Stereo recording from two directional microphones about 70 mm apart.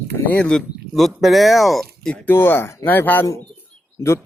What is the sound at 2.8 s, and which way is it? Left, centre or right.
Speech, left.